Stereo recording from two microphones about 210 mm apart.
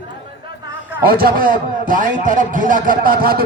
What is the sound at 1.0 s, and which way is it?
A man's voice, 45° right (ahead or behind).